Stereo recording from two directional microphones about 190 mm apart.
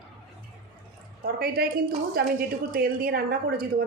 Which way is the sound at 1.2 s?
55° right (ahead or behind).